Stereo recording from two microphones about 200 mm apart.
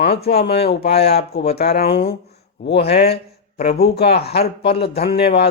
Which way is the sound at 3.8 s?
55° left (ahead or behind).